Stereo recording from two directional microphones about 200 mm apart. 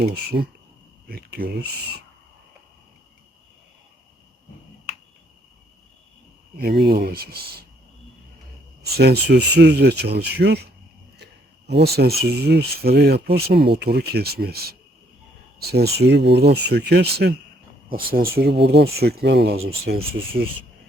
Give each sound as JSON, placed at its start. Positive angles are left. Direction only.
{"t": 0.0, "sound": "speech", "side_deg": -55}
{"t": 6.6, "sound": "speech", "side_deg": -50}
{"t": 8.8, "sound": "speech", "side_deg": -55}
{"t": 20.0, "sound": "speech", "side_deg": -25}